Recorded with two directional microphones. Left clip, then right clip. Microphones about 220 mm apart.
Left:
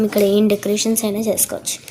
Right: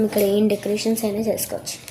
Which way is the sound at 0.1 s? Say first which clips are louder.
Left 4 dB; 45° left (ahead or behind).